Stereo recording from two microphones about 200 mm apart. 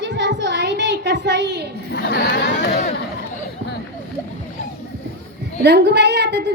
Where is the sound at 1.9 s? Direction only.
55° left (ahead or behind).